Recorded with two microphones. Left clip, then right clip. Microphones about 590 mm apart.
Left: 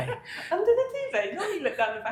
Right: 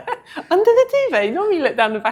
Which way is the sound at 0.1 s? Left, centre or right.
Right.